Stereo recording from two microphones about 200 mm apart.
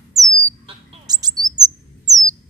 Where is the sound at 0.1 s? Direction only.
15° right (ahead or behind).